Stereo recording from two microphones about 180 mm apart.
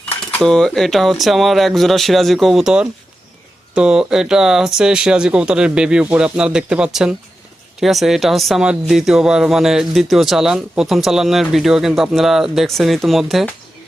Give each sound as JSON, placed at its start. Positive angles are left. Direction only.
{"t": 0.1, "sound": "speech", "side_deg": 10}